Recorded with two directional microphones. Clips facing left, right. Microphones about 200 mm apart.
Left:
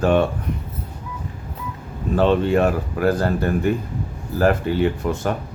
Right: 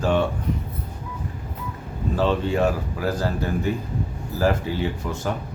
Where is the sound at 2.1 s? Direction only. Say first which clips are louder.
Left 5 dB; 60° left (ahead or behind).